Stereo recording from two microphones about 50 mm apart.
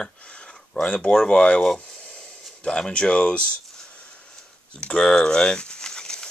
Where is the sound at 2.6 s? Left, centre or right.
Centre.